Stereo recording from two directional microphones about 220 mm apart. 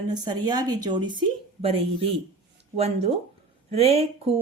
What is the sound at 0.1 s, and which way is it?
Speech, 20° right (ahead or behind).